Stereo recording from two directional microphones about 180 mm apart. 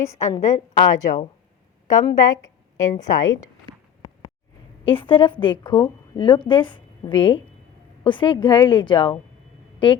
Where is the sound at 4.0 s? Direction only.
25° left (ahead or behind).